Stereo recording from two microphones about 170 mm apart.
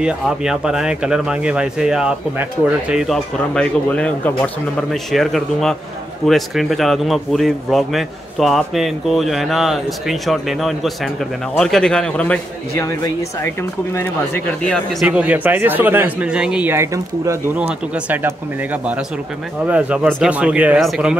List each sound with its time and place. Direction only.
0.0 s a man's voice: 5° right (ahead or behind)
12.8 s a man's voice: 20° left (ahead or behind); by 15.0 s 5° left (ahead or behind)
15.0 s speech: 10° right (ahead or behind)
17.6 s a man's voice: 5° right (ahead or behind)